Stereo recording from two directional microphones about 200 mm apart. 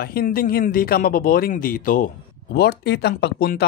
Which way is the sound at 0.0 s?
50° left (ahead or behind).